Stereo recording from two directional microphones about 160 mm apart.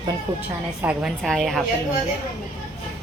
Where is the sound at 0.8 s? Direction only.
Centre (ahead or behind).